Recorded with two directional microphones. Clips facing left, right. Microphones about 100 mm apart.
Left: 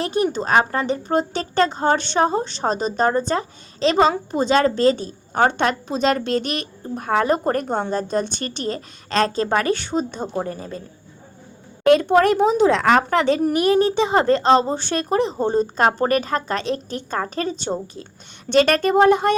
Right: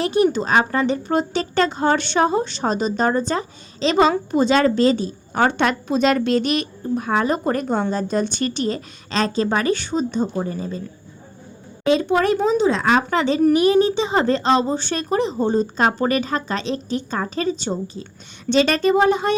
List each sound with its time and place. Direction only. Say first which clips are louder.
0.0 s a woman's voice: right 3 dB; 40° left (ahead or behind); by 10.8 s 55° left (ahead or behind)
11.9 s speech: left 3 dB; 60° left (ahead or behind)